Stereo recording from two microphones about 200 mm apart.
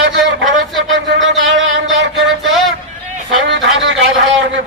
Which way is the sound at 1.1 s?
70° right (ahead or behind).